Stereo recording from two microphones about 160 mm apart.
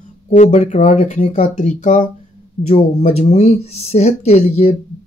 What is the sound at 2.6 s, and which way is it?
Speech, 40° left (ahead or behind).